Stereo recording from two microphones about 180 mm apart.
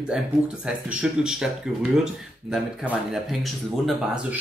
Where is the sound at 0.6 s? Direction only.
5° right (ahead or behind).